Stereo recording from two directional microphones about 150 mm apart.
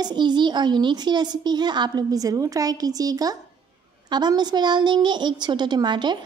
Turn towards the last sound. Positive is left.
turn(degrees=-30)  # may be behind; listen again after turning